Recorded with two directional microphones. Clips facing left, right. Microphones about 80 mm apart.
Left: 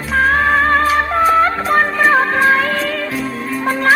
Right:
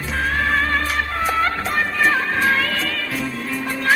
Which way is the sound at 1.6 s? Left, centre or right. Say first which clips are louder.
Left 6 dB; left.